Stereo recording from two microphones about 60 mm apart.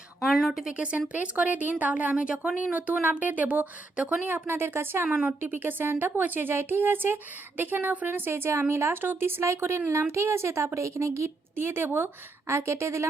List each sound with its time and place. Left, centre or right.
0.2 s a woman's voice: centre
0.8 s speech: centre
4.3 s speech: right
5.0 s a woman's voice: centre
5.4 s speech: right
8.3 s speech: right
9.4 s a woman's voice: right
11.5 s speech: right
12.5 s speech: right